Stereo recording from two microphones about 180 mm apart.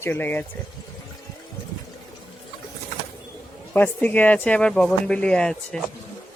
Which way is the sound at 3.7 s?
10° left (ahead or behind).